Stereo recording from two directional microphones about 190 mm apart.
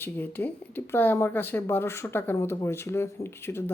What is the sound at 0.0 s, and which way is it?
Speech, 10° left (ahead or behind).